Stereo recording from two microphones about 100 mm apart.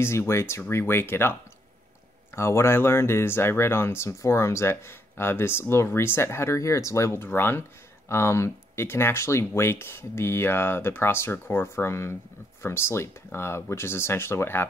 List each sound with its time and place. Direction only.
0.0 s speech: 25° left (ahead or behind)